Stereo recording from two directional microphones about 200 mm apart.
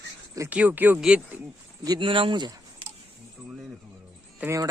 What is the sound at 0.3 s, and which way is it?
Speech, 10° right (ahead or behind).